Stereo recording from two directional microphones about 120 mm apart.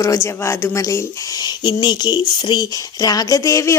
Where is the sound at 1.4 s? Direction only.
40° left (ahead or behind).